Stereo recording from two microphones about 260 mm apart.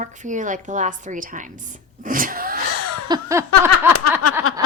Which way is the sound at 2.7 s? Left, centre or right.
Left.